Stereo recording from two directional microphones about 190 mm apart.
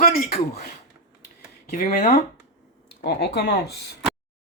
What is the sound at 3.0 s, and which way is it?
Speech, 55° left (ahead or behind).